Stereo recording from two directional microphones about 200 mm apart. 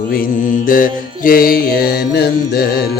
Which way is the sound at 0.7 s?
45° left (ahead or behind).